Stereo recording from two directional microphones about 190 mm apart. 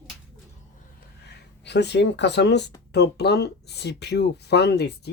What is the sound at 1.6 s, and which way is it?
Speech, 65° left (ahead or behind).